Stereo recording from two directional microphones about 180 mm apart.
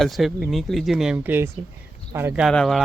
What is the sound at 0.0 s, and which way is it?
Speech, centre (ahead or behind).